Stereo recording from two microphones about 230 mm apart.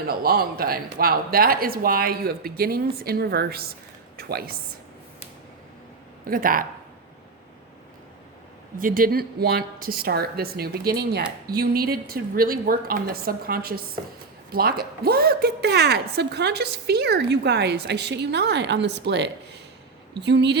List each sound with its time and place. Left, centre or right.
0.1 s a woman's voice: right
6.2 s speech: right
8.8 s a woman's voice: right